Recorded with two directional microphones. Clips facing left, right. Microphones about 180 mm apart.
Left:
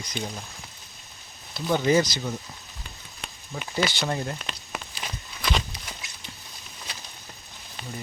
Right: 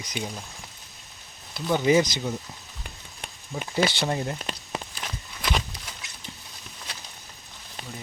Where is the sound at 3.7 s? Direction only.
25° right (ahead or behind).